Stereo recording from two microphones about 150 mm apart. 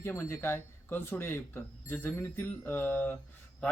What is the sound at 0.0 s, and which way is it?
Speech, 15° left (ahead or behind).